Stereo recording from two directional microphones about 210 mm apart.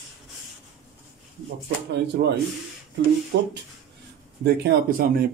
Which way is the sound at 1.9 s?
55° right (ahead or behind).